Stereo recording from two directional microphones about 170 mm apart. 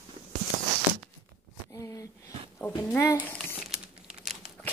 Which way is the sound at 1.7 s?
20° left (ahead or behind).